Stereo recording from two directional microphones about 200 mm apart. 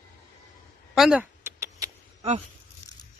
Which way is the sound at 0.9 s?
5° right (ahead or behind).